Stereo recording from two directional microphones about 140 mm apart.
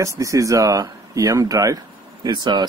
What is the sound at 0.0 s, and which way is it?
Speech, 20° right (ahead or behind).